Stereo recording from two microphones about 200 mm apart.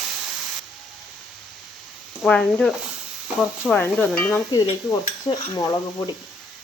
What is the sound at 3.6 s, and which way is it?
Stir, 10° left (ahead or behind).